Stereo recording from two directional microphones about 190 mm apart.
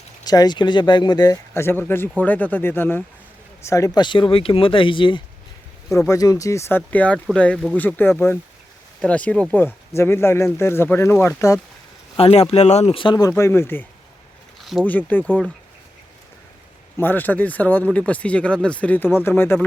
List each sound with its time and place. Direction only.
0.3 s speech: 20° left (ahead or behind)
12.1 s speech: 30° left (ahead or behind); by 13.8 s 10° left (ahead or behind)
14.6 s speech: centre (ahead or behind)
17.0 s speech: 10° left (ahead or behind)